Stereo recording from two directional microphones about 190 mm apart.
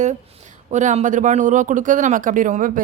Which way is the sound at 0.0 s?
40° right (ahead or behind).